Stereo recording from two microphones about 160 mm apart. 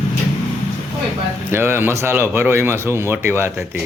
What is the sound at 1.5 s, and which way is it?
Speech, 15° right (ahead or behind).